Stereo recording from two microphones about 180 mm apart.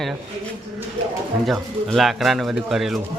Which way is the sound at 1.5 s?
Centre (ahead or behind).